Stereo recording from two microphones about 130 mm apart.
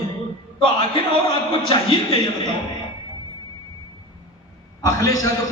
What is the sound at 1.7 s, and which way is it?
Speech, 40° left (ahead or behind).